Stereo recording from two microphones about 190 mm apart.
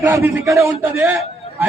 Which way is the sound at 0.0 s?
15° right (ahead or behind).